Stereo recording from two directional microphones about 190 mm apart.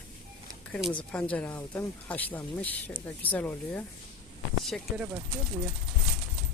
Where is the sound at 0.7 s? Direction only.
5° left (ahead or behind).